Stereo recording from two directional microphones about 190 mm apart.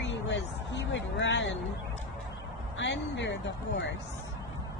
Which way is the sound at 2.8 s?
70° left (ahead or behind).